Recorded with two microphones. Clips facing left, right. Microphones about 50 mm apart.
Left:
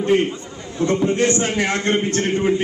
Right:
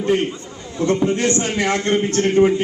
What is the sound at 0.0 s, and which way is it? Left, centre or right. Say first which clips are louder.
A man's voice: left 1 dB; left.